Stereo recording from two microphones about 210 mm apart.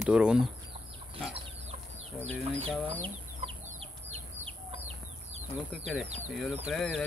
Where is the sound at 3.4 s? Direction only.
25° right (ahead or behind).